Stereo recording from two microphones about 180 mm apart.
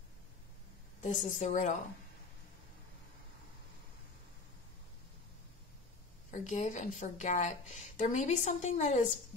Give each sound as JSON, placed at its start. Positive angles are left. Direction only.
{"t": 1.0, "sound": "a woman's voice", "side_deg": 40}
{"t": 6.3, "sound": "a woman's voice", "side_deg": 45}